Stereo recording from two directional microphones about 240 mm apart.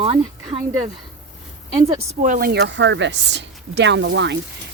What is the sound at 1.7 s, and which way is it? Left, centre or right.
Speech, right.